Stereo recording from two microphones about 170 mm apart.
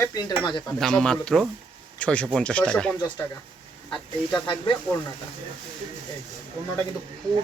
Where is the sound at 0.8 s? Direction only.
5° left (ahead or behind).